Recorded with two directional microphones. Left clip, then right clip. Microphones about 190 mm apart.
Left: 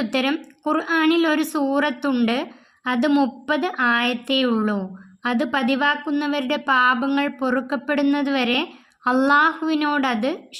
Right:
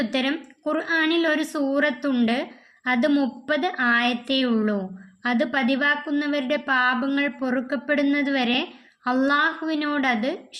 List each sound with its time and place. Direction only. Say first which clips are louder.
0.0 s a woman's voice: left 2 dB; 30° left (ahead or behind)